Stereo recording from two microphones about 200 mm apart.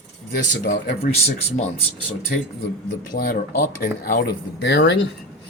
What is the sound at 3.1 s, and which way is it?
Speech, 45° left (ahead or behind).